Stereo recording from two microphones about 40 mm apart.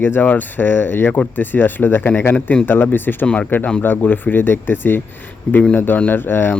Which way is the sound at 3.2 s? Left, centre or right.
Left.